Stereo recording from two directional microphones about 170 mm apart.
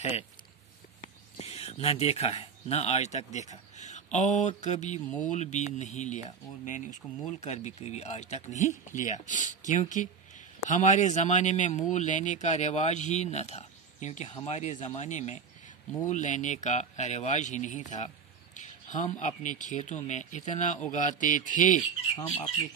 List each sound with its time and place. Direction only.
1.4 s speech: 40° left (ahead or behind)
22.1 s speech: 35° left (ahead or behind)